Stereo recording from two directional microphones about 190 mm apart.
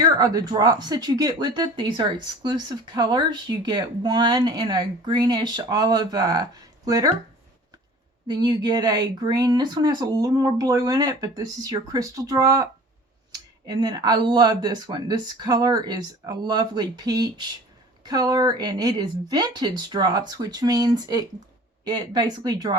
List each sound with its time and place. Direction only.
0.2 s speech: 20° right (ahead or behind)
8.3 s speech: 20° right (ahead or behind)